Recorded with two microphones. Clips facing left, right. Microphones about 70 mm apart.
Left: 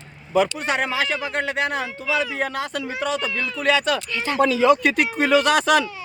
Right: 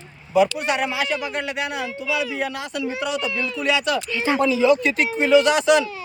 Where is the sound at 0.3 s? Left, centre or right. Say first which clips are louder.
Right 2 dB; left.